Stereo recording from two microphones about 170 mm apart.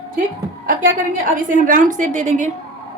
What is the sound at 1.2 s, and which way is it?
A woman's voice, 50° right (ahead or behind).